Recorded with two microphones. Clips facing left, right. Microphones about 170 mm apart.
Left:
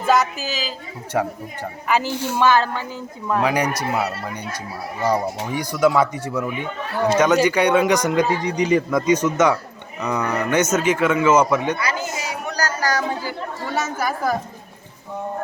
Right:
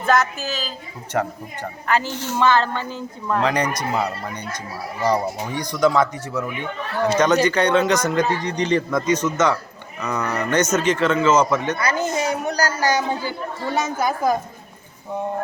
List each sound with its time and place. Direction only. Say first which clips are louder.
0.0 s speech: left 1 dB; 5° left (ahead or behind)
12.5 s chatter: right 2 dB; 30° right (ahead or behind)
13.7 s a woman's voice: right 1 dB; 15° right (ahead or behind)